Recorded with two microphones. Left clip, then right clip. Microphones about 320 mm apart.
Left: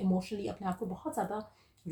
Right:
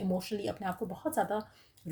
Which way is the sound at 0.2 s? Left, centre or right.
Right.